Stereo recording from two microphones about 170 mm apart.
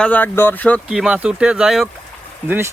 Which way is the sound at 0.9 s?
5° right (ahead or behind).